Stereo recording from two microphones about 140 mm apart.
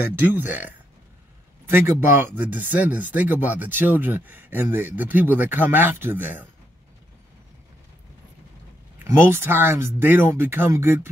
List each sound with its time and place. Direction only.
0.0 s speech: 15° right (ahead or behind)
9.0 s speech: 15° right (ahead or behind)